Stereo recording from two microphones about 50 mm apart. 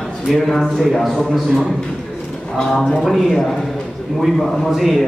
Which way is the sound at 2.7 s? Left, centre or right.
Centre.